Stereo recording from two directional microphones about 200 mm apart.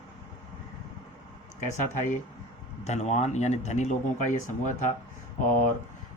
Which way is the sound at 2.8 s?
35° left (ahead or behind).